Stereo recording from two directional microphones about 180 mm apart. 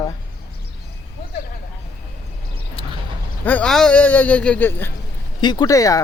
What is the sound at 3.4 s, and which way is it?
Speech, 5° left (ahead or behind).